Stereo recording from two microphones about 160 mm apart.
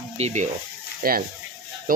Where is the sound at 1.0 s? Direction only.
65° right (ahead or behind).